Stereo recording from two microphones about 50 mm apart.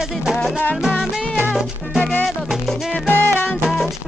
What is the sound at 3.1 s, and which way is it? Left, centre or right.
Music, left.